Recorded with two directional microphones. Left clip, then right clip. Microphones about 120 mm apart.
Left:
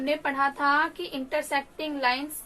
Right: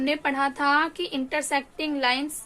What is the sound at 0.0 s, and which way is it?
A woman's voice, 70° right (ahead or behind).